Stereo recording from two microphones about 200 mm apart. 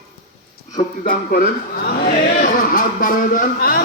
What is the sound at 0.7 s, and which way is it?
Speech, 45° left (ahead or behind).